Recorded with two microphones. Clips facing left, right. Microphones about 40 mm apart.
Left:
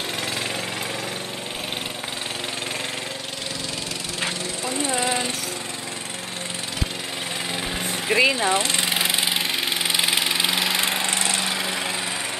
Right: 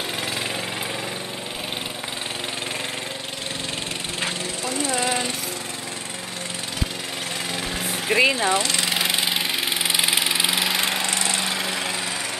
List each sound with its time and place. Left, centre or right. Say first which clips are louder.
4.6 s vehicle: even; left
4.9 s jackhammer: even; centre
7.8 s a sound: even; centre
8.5 s speech: even; left
8.9 s engine: even; centre
9.8 s lawn mower: even; centre